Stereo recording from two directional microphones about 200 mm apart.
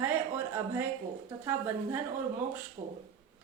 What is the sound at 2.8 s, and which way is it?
Speech, 35° right (ahead or behind).